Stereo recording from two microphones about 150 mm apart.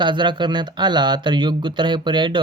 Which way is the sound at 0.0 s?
30° right (ahead or behind).